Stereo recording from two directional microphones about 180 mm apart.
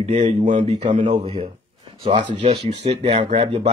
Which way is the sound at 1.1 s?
30° right (ahead or behind).